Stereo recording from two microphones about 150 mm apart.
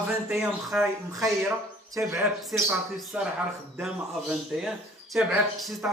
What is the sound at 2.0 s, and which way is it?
A man's voice, 20° right (ahead or behind).